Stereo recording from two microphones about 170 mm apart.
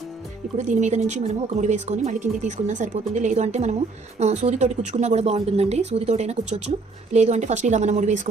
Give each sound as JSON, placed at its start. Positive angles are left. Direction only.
{"t": 0.5, "sound": "a woman's voice", "side_deg": -45}